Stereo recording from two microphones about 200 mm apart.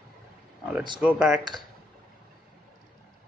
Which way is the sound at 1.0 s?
5° right (ahead or behind).